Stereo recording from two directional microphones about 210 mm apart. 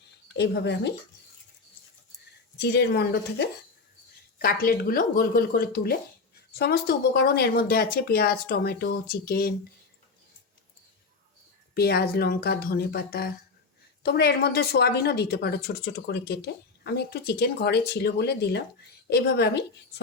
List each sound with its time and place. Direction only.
0.3 s speech: 55° left (ahead or behind)
2.6 s speech: 50° left (ahead or behind)
11.7 s speech: 50° left (ahead or behind)